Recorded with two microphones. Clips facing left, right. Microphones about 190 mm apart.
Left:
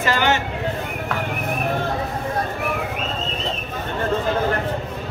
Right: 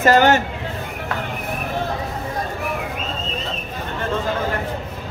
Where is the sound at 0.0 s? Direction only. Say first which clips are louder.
Right 6 dB; 45° right (ahead or behind).